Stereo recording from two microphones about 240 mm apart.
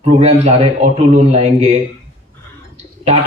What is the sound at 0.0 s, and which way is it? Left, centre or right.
A man's voice, right.